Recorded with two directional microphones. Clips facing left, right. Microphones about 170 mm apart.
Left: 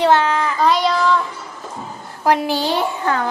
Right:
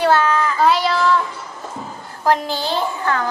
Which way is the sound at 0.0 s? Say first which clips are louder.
Left 1 dB; 20° left (ahead or behind).